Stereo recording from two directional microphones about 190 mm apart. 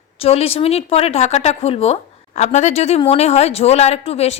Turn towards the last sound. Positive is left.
turn(degrees=30)  # may be behind; listen again after turning